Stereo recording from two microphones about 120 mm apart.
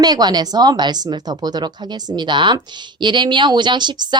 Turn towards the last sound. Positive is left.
turn(degrees=-40)  # may be behind; listen again after turning